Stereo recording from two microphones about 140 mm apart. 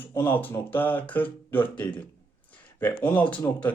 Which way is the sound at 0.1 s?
15° left (ahead or behind).